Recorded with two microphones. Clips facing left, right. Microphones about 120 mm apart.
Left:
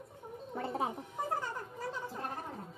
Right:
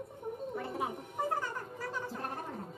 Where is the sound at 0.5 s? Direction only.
30° left (ahead or behind).